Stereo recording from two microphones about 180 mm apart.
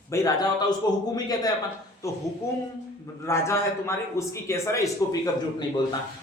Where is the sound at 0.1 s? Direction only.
15° left (ahead or behind).